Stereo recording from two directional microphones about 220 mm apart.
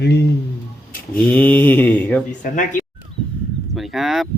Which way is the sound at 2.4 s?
35° left (ahead or behind).